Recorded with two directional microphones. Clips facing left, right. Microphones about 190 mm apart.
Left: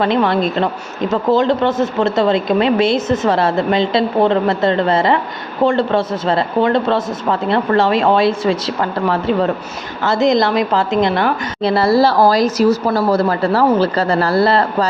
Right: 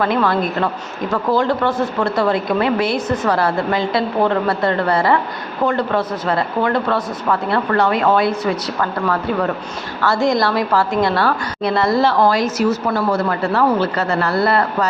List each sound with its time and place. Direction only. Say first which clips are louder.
0.0 s speech: left 2 dB; 25° left (ahead or behind)
11.7 s speech: left 3 dB; 30° left (ahead or behind)